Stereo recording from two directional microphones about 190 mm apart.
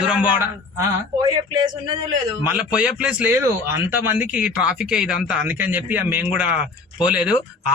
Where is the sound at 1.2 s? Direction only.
25° right (ahead or behind).